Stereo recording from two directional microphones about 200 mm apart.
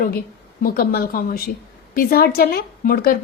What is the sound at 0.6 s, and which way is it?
A woman's voice, 50° left (ahead or behind).